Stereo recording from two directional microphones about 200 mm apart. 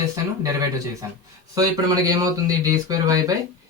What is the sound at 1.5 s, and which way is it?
Speech, 20° right (ahead or behind).